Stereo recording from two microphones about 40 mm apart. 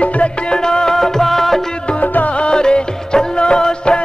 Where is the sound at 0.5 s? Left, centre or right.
Centre.